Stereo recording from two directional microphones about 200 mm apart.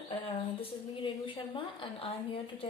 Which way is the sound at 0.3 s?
25° left (ahead or behind).